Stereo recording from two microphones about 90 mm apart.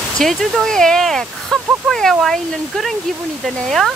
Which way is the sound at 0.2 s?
Centre (ahead or behind).